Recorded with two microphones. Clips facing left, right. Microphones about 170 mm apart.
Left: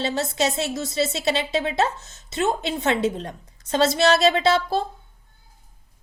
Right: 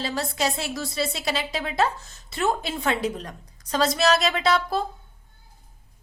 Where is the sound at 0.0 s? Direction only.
25° left (ahead or behind).